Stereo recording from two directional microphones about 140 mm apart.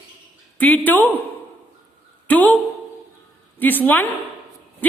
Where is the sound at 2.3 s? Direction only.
10° left (ahead or behind).